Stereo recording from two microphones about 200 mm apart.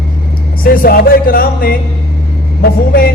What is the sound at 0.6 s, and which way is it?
Speech, 45° left (ahead or behind).